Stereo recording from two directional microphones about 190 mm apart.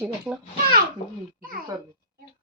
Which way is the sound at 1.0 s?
30° left (ahead or behind).